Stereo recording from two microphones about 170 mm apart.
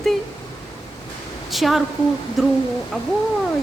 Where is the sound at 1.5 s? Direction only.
Centre (ahead or behind).